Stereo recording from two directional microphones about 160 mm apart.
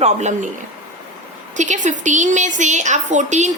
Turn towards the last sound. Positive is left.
turn(degrees=-50)  # may be behind; listen again after turning